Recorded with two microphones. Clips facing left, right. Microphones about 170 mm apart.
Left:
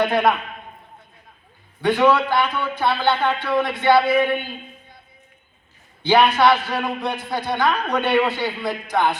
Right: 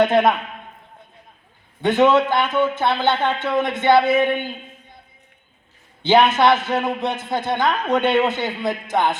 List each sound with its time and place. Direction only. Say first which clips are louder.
0.0 s a man's voice: right 3 dB; 20° right (ahead or behind)
1.8 s a man's voice: right 2 dB; 20° right (ahead or behind)
6.0 s a man's voice: right 1 dB; 20° right (ahead or behind)